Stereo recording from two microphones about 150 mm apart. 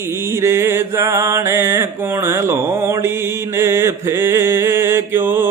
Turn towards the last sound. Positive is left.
turn(degrees=-15)  # may be behind; listen again after turning